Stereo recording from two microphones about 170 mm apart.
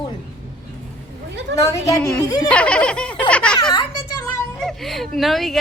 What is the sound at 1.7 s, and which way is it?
Speech, 20° left (ahead or behind).